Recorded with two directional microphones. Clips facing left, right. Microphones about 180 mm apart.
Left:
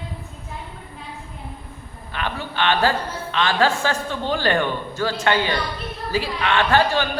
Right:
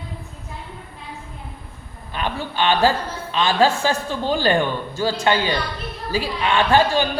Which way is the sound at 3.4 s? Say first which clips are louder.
Right 2 dB; 10° right (ahead or behind).